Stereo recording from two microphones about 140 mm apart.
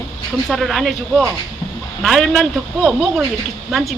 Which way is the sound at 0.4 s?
Centre (ahead or behind).